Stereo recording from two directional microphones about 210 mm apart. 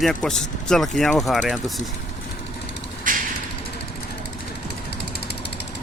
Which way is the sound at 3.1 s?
40° right (ahead or behind).